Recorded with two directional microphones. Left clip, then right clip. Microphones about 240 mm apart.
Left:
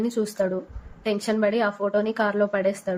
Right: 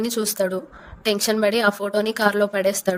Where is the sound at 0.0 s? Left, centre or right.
Right.